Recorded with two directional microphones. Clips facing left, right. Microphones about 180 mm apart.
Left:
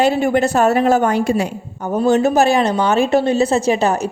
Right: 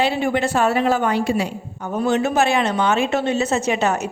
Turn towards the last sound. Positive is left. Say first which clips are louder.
# left 4 dB
turn(degrees=35)  # may be behind; listen again after turning